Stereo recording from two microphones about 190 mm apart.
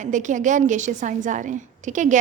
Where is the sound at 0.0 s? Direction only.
40° right (ahead or behind).